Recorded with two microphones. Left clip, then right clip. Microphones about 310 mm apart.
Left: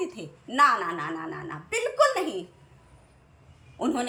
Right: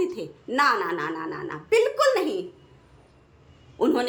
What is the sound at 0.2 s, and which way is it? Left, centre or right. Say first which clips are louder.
Speech: left 6 dB; centre.